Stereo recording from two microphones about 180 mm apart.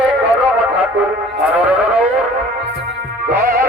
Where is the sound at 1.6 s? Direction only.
10° right (ahead or behind).